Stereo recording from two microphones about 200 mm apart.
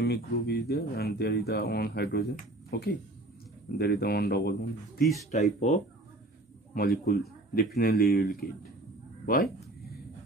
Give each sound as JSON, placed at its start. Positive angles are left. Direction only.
{"t": 0.0, "sound": "speech", "side_deg": 55}
{"t": 5.3, "sound": "speech", "side_deg": 35}
{"t": 7.1, "sound": "speech", "side_deg": 50}